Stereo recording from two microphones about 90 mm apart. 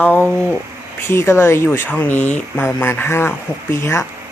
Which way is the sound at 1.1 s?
30° left (ahead or behind).